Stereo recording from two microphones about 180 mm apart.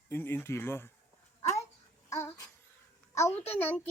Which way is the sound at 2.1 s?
15° left (ahead or behind).